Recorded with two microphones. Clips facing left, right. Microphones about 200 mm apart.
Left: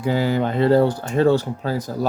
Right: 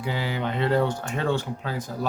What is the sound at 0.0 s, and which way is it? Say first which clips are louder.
Speech: left 8 dB; 45° left (ahead or behind).